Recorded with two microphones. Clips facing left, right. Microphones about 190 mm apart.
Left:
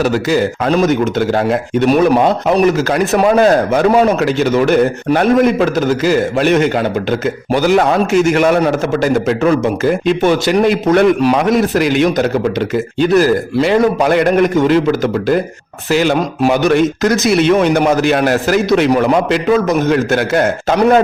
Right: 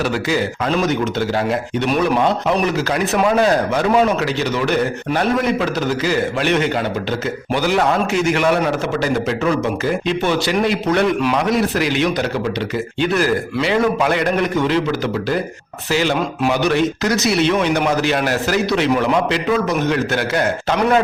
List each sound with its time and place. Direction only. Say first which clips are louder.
0.0 s a man's voice: left 6 dB; 45° left (ahead or behind)